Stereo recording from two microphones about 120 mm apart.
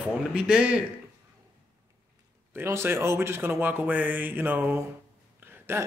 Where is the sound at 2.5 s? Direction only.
20° right (ahead or behind).